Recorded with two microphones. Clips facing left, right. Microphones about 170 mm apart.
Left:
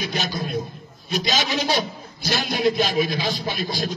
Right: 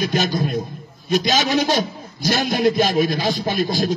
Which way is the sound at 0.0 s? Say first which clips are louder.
Right 6 dB; 45° right (ahead or behind).